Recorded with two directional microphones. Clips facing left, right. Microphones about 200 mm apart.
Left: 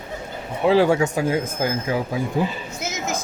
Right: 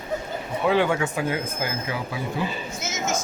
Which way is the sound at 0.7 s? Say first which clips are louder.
Left 5 dB; 35° left (ahead or behind).